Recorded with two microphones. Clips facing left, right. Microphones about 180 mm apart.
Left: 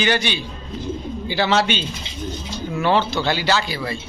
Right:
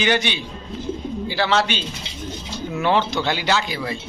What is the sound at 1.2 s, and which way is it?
Speech, centre (ahead or behind).